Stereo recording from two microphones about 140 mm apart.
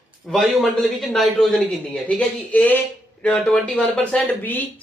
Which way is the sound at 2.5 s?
10° left (ahead or behind).